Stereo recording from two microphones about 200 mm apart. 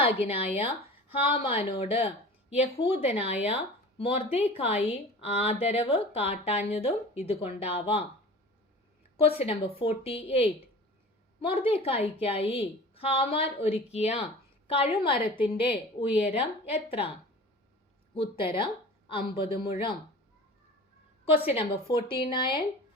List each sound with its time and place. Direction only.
0.3 s speech: 30° left (ahead or behind)
9.4 s speech: 30° left (ahead or behind)
18.1 s speech: 25° left (ahead or behind)
21.5 s speech: 30° left (ahead or behind)